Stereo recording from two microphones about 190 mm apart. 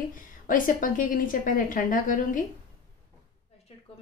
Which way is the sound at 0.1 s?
45° left (ahead or behind).